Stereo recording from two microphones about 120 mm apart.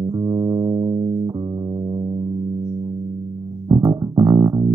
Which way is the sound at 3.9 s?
30° right (ahead or behind).